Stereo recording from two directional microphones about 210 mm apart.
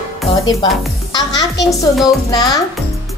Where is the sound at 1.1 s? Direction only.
20° left (ahead or behind).